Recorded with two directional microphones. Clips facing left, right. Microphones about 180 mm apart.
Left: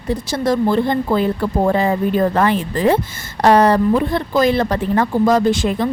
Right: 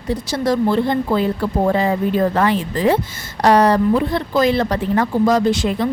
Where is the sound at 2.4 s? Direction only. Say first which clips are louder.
Left 1 dB; 50° left (ahead or behind).